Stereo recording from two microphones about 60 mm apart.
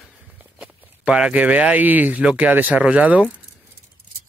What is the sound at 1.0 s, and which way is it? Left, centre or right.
Speech, centre.